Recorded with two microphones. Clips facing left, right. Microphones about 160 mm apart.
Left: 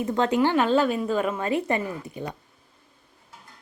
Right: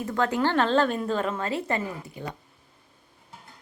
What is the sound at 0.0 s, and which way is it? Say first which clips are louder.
A woman's voice: left 3 dB; 20° left (ahead or behind).